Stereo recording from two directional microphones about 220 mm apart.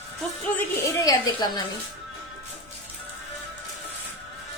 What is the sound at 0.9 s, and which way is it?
Speech, 15° left (ahead or behind).